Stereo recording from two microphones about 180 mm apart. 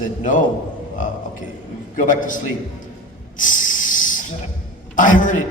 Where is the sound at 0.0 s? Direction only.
45° left (ahead or behind).